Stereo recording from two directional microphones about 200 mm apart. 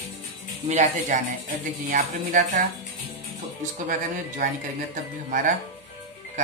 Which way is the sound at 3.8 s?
45° right (ahead or behind).